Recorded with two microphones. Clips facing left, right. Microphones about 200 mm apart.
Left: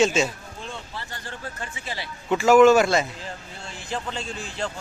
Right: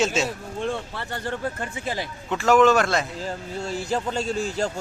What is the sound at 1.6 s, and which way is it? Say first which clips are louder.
Speech: right 6 dB; 50° right (ahead or behind).